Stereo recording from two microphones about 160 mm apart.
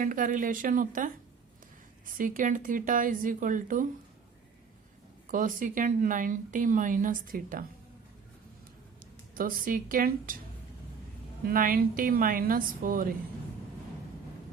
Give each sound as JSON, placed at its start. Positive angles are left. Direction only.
{"t": 0.0, "sound": "speech", "side_deg": -55}
{"t": 2.1, "sound": "speech", "side_deg": -55}
{"t": 5.3, "sound": "speech", "side_deg": -55}
{"t": 9.3, "sound": "speech", "side_deg": -60}
{"t": 11.4, "sound": "speech", "side_deg": -65}